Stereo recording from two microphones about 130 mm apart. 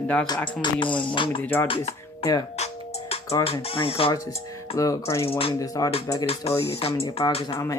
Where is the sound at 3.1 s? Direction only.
50° left (ahead or behind).